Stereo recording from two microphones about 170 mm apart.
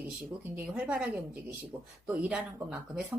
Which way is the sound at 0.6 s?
10° right (ahead or behind).